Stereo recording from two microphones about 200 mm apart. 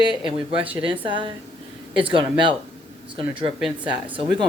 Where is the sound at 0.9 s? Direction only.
25° right (ahead or behind).